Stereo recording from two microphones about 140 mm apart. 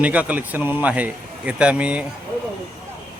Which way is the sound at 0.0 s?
10° right (ahead or behind).